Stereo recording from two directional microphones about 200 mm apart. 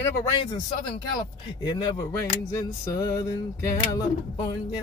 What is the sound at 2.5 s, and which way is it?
Music, 15° left (ahead or behind).